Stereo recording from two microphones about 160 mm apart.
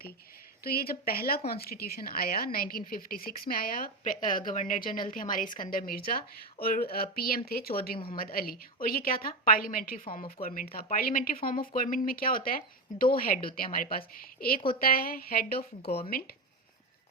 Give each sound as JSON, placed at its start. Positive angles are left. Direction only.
{"t": 0.6, "sound": "a woman's voice", "side_deg": 70}